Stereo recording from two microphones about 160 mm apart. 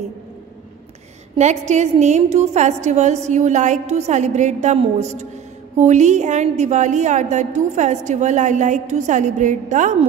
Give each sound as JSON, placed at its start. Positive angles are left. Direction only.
{"t": 1.3, "sound": "a woman's voice", "side_deg": -45}